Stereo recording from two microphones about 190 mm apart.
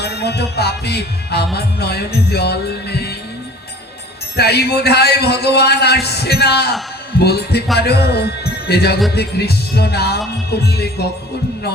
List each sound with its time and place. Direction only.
0.0 s music: 60° left (ahead or behind)
4.4 s music: 55° left (ahead or behind)
7.8 s a man's voice: 60° left (ahead or behind)
9.1 s music: 60° left (ahead or behind)